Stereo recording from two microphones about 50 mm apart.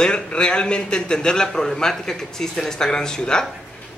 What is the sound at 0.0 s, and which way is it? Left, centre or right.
Speech, centre.